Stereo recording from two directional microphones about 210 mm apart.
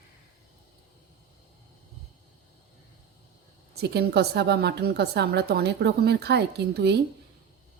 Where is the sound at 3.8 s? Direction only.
50° right (ahead or behind).